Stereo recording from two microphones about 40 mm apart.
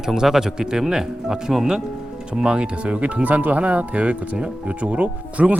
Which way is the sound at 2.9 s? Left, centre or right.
Right.